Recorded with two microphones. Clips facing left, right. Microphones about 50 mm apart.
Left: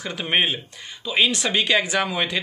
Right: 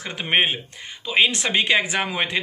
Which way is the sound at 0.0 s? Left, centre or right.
Right.